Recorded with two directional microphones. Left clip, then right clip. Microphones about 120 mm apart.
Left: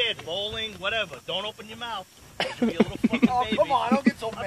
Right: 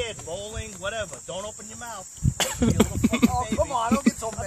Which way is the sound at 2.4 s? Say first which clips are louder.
Right 1 dB; 25° right (ahead or behind).